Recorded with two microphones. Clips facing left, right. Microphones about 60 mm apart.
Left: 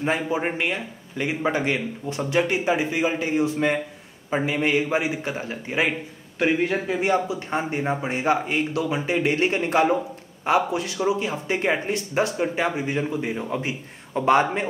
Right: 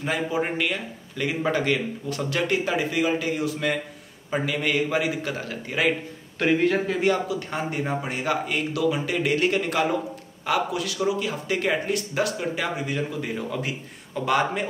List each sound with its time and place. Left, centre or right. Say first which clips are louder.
0.0 s speech: left 2 dB; left